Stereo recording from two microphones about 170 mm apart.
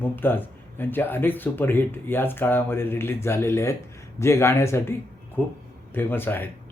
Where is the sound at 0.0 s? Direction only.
10° left (ahead or behind).